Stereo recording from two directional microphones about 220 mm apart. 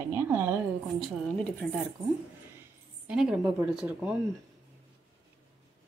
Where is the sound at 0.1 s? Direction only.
10° right (ahead or behind).